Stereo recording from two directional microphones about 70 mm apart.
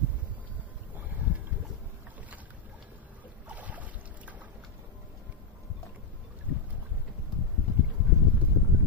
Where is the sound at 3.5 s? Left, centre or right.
Right.